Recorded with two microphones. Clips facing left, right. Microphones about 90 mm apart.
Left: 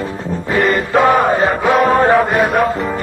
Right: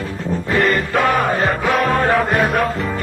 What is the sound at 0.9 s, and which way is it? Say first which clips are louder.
Music: left 5 dB; 20° left (ahead or behind).